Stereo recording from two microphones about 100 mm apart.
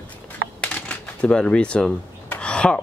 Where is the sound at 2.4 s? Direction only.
10° left (ahead or behind).